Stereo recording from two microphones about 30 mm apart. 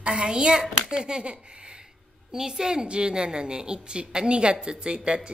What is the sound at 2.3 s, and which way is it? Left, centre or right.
A woman's voice, right.